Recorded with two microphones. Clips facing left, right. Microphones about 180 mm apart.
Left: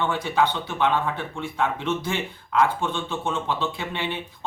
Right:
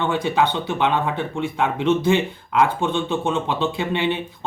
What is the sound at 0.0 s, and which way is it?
Speech, 20° right (ahead or behind).